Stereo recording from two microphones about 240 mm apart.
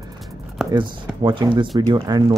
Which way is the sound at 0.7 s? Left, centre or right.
Centre.